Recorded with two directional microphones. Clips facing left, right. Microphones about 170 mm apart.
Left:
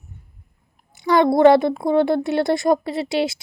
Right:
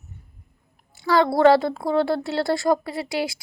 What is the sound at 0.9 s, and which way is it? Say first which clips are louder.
A woman's voice: left 3 dB; 20° left (ahead or behind).